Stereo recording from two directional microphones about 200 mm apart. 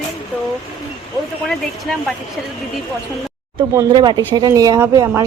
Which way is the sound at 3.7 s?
20° right (ahead or behind).